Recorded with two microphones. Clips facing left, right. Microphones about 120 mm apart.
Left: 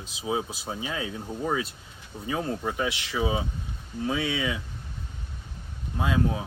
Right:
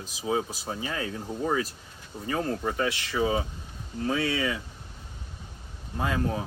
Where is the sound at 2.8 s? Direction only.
15° left (ahead or behind).